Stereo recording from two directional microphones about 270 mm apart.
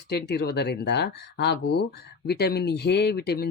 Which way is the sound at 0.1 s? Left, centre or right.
Left.